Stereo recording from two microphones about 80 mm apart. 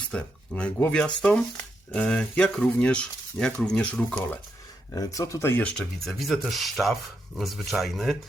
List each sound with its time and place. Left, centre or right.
0.1 s speech: centre
4.9 s speech: left
5.5 s speech: left
5.7 s speech: centre